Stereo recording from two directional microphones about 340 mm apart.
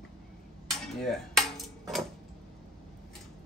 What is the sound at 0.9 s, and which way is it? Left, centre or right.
Cutlery, centre.